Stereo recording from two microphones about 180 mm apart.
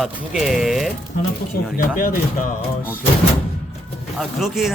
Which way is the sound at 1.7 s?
50° left (ahead or behind).